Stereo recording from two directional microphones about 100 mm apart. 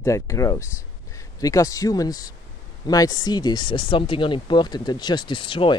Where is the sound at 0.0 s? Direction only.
30° left (ahead or behind).